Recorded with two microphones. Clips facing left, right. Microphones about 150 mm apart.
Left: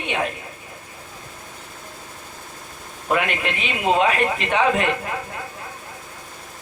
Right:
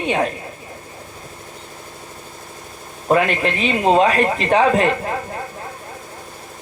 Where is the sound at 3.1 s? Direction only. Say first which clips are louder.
Right 6 dB; 35° right (ahead or behind).